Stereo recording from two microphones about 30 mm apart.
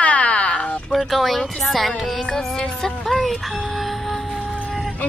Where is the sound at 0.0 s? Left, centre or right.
Left.